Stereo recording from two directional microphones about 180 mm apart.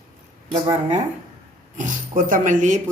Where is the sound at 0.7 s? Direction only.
40° right (ahead or behind).